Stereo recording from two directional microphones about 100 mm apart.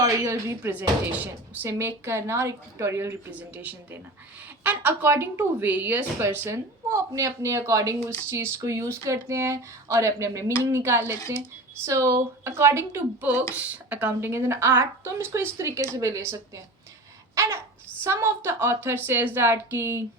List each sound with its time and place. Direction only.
0.0 s speech: 30° right (ahead or behind)
0.7 s speech: 15° right (ahead or behind)
3.3 s speech: 15° right (ahead or behind); by 16.4 s 35° right (ahead or behind)
17.3 s a sound: 25° right (ahead or behind)
18.0 s speech: 25° right (ahead or behind)